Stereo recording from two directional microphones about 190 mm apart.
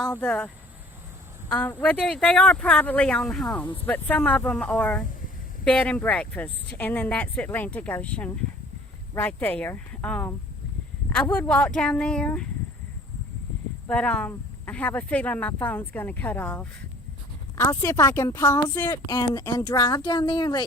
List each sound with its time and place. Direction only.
0.0 s speech: 5° left (ahead or behind)
13.8 s a woman's voice: 5° left (ahead or behind); by 20.7 s 25° left (ahead or behind)